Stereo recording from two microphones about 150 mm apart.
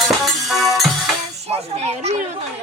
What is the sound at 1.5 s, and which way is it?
Speech, 45° right (ahead or behind).